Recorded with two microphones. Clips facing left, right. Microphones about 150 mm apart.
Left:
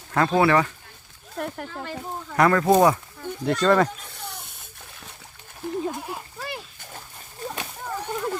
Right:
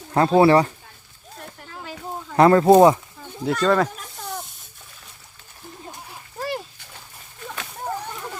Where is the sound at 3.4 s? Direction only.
Centre (ahead or behind).